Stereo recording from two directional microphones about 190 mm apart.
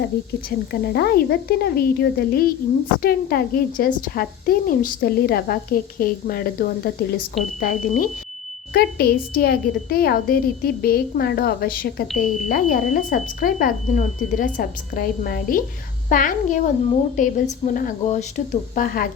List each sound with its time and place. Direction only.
0.7 s a woman's voice: 55° left (ahead or behind)